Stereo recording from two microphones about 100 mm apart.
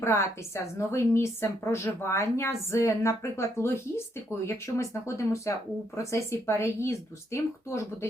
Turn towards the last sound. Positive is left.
turn(degrees=30)  # may be behind; listen again after turning